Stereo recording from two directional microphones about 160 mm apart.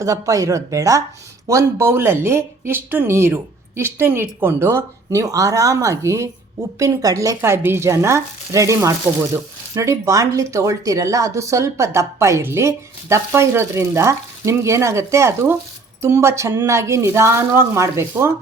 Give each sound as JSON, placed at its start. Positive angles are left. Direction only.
{"t": 0.0, "sound": "speech", "side_deg": -20}